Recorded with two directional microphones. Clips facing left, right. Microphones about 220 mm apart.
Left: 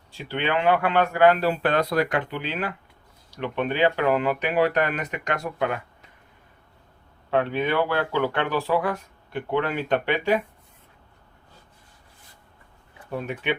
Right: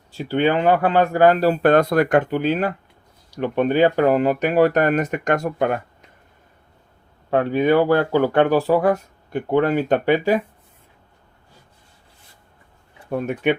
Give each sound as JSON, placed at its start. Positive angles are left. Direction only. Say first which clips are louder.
{"t": 0.1, "sound": "speech", "louder": "right 7 dB", "side_deg": -40}
{"t": 7.3, "sound": "speech", "louder": "right 6 dB", "side_deg": -45}
{"t": 13.1, "sound": "speech", "louder": "right 7 dB", "side_deg": -50}